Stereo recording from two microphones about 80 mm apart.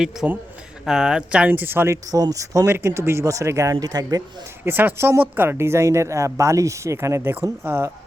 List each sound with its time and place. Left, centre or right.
0.2 s speech: centre
1.5 s speech: right
2.0 s speech: right
2.6 s speech: right
4.6 s speech: right